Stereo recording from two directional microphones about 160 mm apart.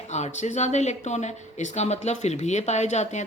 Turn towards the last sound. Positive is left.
turn(degrees=45)  # may be behind; listen again after turning